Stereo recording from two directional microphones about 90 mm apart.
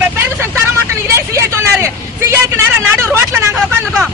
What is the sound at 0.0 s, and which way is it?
Vehicle, 25° right (ahead or behind).